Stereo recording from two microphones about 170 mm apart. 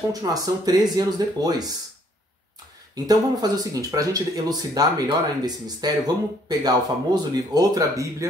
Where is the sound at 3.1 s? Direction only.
20° right (ahead or behind).